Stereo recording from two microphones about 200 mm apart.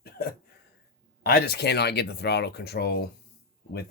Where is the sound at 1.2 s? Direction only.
50° left (ahead or behind).